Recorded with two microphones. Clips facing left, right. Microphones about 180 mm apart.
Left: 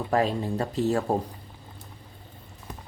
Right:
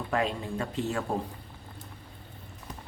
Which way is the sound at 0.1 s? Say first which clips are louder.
Left 5 dB; 35° left (ahead or behind).